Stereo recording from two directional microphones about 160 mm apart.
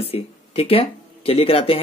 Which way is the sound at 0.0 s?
35° left (ahead or behind).